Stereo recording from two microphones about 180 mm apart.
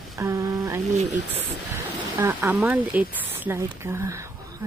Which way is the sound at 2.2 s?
10° right (ahead or behind).